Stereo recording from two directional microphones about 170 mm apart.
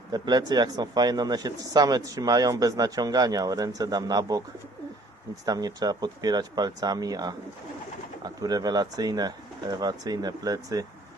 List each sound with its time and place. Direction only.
0.1 s speech: 25° right (ahead or behind)
5.5 s speech: 25° right (ahead or behind)